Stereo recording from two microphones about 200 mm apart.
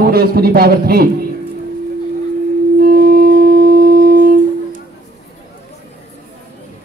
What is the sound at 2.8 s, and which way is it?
Wind instrument, 50° right (ahead or behind).